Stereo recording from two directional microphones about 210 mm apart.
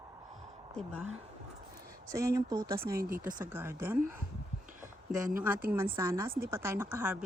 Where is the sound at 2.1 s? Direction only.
15° right (ahead or behind).